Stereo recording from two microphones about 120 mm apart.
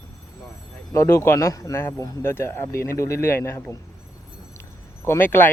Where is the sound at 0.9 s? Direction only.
25° left (ahead or behind).